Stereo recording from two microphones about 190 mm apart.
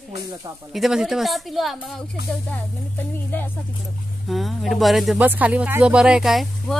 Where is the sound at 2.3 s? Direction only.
10° left (ahead or behind).